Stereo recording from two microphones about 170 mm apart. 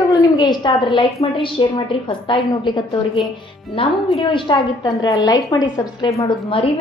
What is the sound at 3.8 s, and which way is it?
A woman's voice, 35° left (ahead or behind).